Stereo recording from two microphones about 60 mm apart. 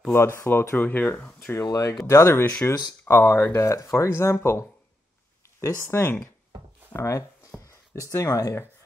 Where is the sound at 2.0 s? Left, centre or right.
Left.